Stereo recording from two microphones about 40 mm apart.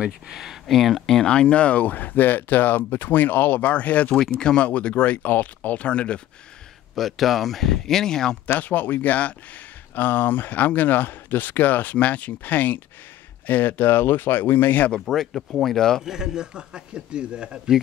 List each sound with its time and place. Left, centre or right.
0.3 s speech: centre
0.7 s speech: centre
1.0 s speech: centre
1.3 s speech: left
4.2 s speech: centre
4.6 s speech: left
7.0 s speech: centre
8.5 s speech: left
9.9 s speech: left
15.0 s speech: centre
16.0 s a man's voice: centre